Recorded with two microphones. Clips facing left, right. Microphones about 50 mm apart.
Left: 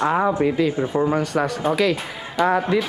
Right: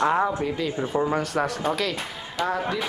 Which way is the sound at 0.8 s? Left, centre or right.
Left.